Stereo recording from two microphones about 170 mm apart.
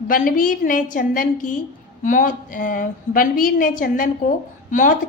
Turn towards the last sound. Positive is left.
turn(degrees=50)  # may be behind; listen again after turning